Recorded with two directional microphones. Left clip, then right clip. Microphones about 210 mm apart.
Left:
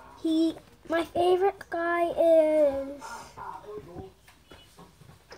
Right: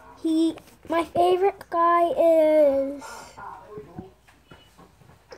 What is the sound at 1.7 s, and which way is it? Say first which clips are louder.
Child singing: right 10 dB; 5° left (ahead or behind).